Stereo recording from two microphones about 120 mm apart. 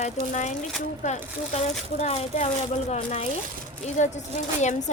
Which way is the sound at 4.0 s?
80° left.